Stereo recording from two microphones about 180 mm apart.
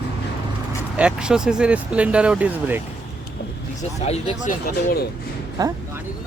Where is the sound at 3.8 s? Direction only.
40° left (ahead or behind).